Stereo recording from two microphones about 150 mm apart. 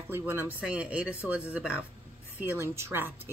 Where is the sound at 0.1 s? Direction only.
15° right (ahead or behind).